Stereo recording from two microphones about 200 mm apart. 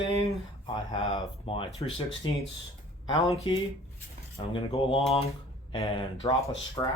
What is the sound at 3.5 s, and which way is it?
Speech, 25° left (ahead or behind).